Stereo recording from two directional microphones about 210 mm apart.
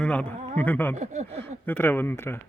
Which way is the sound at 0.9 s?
35° right (ahead or behind).